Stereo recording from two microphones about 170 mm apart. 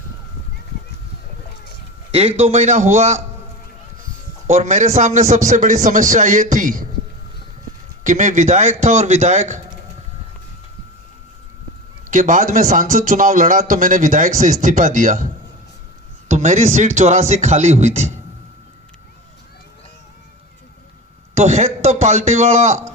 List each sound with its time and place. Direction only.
2.4 s a man's voice: 40° right (ahead or behind)
4.4 s speech: 45° right (ahead or behind)
8.0 s speech: 45° right (ahead or behind)
12.1 s speech: 45° right (ahead or behind)
16.3 s speech: 45° right (ahead or behind)
21.3 s speech: 40° right (ahead or behind)